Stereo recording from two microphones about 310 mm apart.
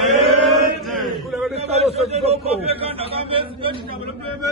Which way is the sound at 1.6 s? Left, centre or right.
Centre.